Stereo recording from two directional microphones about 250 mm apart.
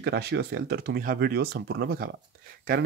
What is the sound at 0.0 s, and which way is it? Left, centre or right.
Speech, right.